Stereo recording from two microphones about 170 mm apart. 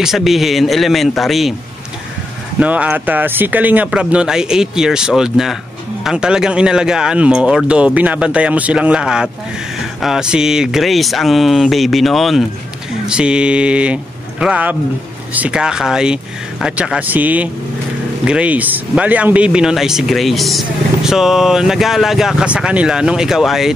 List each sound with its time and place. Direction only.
0.0 s speech: centre (ahead or behind)
2.6 s speech: 10° right (ahead or behind)